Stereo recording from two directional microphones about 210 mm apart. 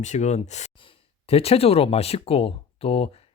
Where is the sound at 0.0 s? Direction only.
35° left (ahead or behind).